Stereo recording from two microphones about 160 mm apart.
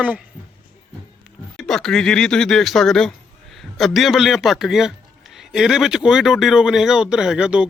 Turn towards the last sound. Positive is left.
turn(degrees=-5)  # may be behind; listen again after turning